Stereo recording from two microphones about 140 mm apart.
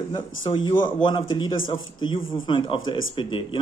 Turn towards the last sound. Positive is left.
turn(degrees=35)  # may be behind; listen again after turning